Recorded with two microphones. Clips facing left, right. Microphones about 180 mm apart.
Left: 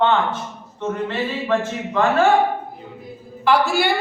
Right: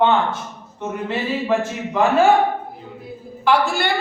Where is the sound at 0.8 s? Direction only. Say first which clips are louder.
Left 1 dB; 10° right (ahead or behind).